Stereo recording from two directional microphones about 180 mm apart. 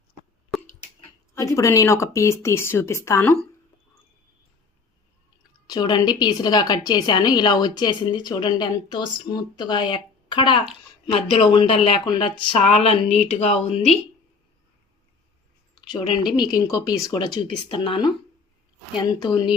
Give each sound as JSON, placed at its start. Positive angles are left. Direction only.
{"t": 1.4, "sound": "speech", "side_deg": 15}
{"t": 5.6, "sound": "a woman's voice", "side_deg": 25}
{"t": 15.7, "sound": "a woman's voice", "side_deg": 25}